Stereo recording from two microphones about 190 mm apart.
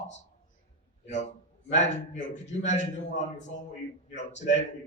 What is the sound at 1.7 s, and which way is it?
A man's voice, 40° left (ahead or behind).